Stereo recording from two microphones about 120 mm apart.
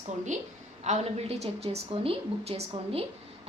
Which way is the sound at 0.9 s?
65° right (ahead or behind).